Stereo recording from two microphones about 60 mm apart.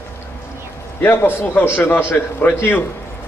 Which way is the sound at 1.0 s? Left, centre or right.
Left.